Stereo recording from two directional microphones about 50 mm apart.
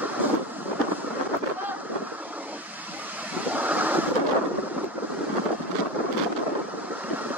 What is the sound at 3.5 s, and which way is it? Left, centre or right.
Vehicle, right.